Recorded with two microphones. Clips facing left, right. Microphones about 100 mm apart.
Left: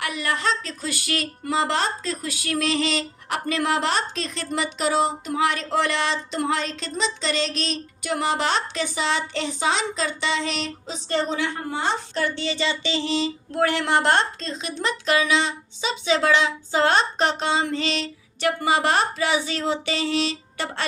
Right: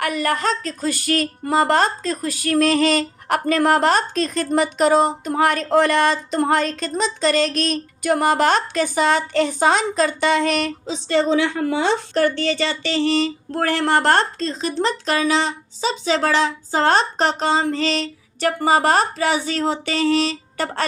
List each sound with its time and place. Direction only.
0.0 s speech: 45° right (ahead or behind)
10.8 s a woman's voice: 90° right
12.1 s speech: 50° right (ahead or behind)